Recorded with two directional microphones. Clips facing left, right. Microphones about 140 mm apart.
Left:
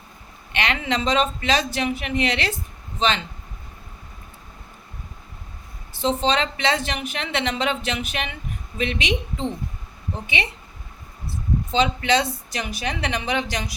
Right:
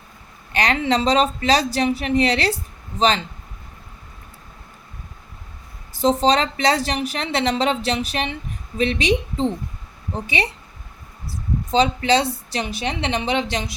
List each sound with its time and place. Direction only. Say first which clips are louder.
0.5 s speech: right 5 dB; 35° right (ahead or behind)
5.9 s speech: right 4 dB; 40° right (ahead or behind)